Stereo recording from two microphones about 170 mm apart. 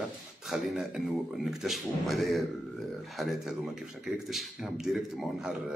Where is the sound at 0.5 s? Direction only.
Centre (ahead or behind).